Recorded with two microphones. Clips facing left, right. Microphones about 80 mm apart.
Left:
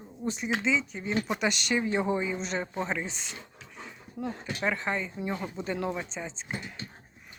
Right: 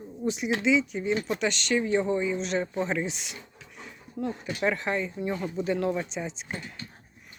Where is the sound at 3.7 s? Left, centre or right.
Centre.